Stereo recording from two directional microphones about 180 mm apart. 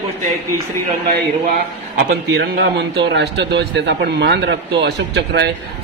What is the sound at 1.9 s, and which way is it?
A man's voice, 60° right (ahead or behind).